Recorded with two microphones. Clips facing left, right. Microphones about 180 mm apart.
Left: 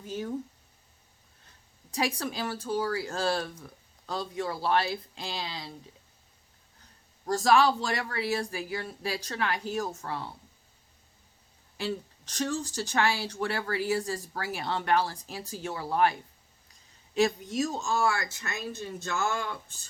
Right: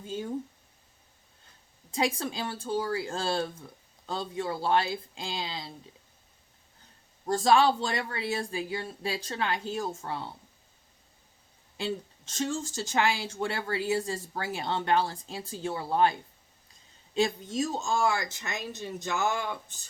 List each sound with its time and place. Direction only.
0.0 s speech: 25° right (ahead or behind)
1.9 s speech: 25° right (ahead or behind)
7.3 s speech: 30° right (ahead or behind)
11.8 s speech: 25° right (ahead or behind)
17.2 s speech: 30° right (ahead or behind)